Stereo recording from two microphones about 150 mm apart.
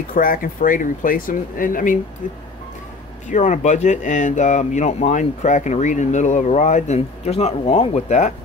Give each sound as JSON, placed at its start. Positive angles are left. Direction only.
{"t": 0.1, "sound": "speech", "side_deg": 65}
{"t": 3.3, "sound": "speech", "side_deg": 55}